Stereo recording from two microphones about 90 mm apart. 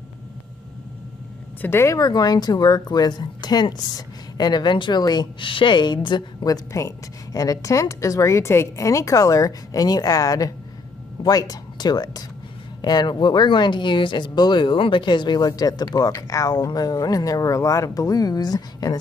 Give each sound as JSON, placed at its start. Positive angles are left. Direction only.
{"t": 1.6, "sound": "speech", "side_deg": 25}
{"t": 2.0, "sound": "speech", "side_deg": 50}
{"t": 5.5, "sound": "a woman's voice", "side_deg": 65}
{"t": 6.4, "sound": "a woman's voice", "side_deg": 40}